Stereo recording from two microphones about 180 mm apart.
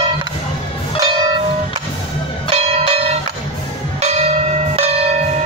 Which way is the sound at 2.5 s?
35° right (ahead or behind).